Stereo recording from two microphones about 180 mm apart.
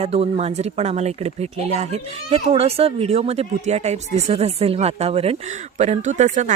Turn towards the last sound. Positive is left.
turn(degrees=-40)  # may be behind; listen again after turning